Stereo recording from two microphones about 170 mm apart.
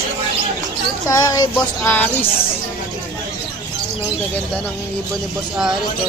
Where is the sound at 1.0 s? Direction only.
20° left (ahead or behind).